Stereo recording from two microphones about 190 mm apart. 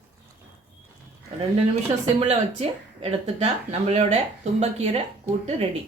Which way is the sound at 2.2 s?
35° right (ahead or behind).